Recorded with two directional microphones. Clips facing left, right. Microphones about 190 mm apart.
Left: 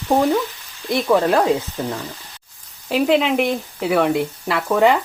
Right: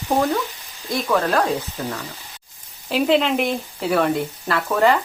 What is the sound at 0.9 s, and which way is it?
Speech, 15° left (ahead or behind).